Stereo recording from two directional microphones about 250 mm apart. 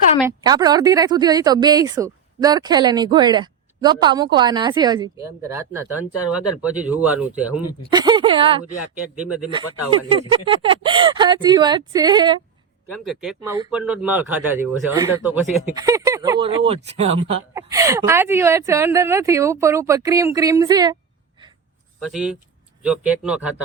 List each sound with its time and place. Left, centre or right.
0.3 s speech: centre
6.1 s speech: left
6.6 s speech: centre
7.9 s speech: centre
9.2 s speech: centre
9.5 s speech: centre
13.0 s speech: centre; by 17.3 s right
17.5 s speech: centre
22.0 s speech: centre